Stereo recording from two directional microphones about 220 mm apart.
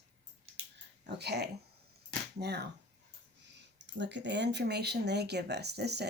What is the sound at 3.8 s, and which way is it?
Speech, 55° right (ahead or behind).